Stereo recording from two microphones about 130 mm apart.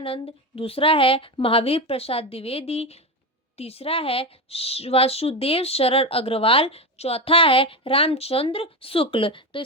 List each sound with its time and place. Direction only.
0.0 s a woman's voice: 45° left (ahead or behind)